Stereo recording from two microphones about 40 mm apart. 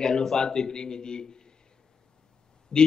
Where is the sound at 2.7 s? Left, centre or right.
Left.